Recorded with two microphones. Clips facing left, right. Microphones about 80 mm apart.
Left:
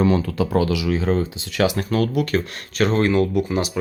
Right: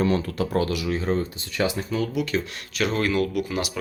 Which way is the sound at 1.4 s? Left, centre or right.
Left.